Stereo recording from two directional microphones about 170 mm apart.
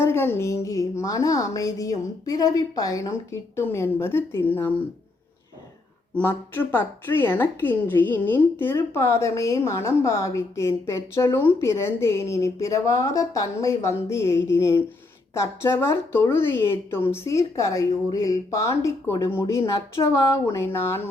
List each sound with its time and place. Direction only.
0.0 s a woman's voice: 15° left (ahead or behind)
6.1 s a woman's voice: 10° left (ahead or behind)